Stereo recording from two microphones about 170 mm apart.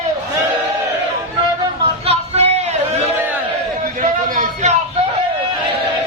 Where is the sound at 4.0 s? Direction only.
50° right (ahead or behind).